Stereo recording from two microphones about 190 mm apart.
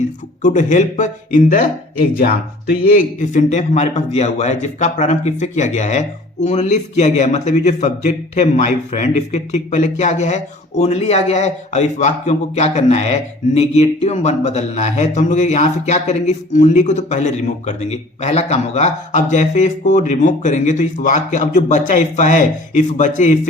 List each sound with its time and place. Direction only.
0.4 s speech: 40° left (ahead or behind)